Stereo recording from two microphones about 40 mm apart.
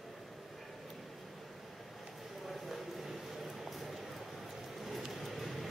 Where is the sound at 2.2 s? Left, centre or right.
Centre.